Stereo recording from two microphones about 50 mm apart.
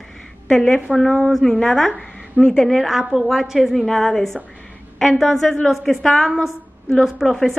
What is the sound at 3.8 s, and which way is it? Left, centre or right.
A woman's voice, centre.